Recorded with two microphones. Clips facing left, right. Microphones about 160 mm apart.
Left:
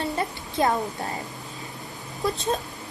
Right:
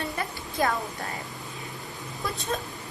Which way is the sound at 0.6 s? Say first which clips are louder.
Left 3 dB; 25° left (ahead or behind).